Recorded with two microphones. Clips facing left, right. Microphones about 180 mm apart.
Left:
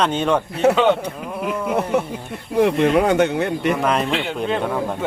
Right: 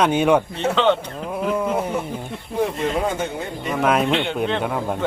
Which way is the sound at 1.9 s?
70° left (ahead or behind).